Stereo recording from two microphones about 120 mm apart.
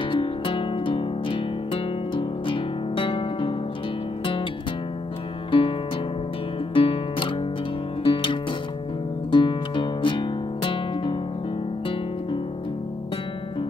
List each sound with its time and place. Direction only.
0.0 s music: 45° left (ahead or behind)
5.5 s music: 45° left (ahead or behind)